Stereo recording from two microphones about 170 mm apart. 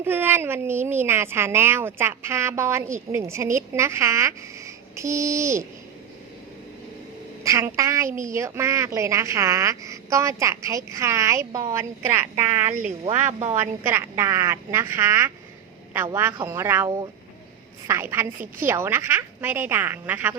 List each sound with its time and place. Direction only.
0.0 s speech: 10° right (ahead or behind)
7.4 s speech: 20° right (ahead or behind)
13.1 s speech: 45° right (ahead or behind)
13.6 s speech: 15° right (ahead or behind)